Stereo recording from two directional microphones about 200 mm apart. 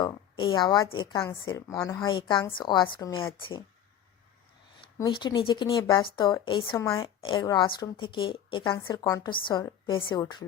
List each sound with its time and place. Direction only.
0.0 s a woman's voice: 25° left (ahead or behind)
4.9 s a woman's voice: 20° left (ahead or behind)